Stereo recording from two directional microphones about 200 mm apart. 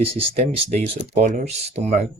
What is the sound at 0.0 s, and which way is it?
Speech, 30° right (ahead or behind).